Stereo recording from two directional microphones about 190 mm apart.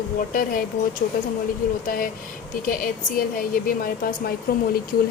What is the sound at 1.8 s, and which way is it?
Speech, 50° left (ahead or behind).